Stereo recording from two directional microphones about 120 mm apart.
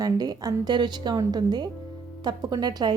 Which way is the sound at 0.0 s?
30° right (ahead or behind).